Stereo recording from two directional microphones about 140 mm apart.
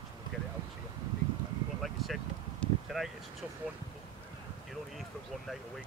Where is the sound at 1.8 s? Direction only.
Centre (ahead or behind).